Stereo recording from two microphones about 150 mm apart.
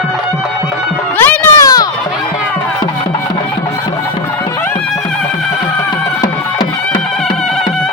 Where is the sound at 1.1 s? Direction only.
10° left (ahead or behind).